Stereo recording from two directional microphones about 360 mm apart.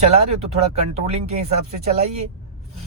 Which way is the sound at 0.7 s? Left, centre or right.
Centre.